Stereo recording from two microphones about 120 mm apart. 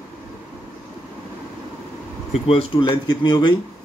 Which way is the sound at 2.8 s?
40° left (ahead or behind).